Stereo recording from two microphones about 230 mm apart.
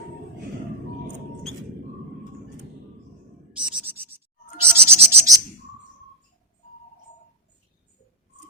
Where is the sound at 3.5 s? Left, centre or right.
Centre.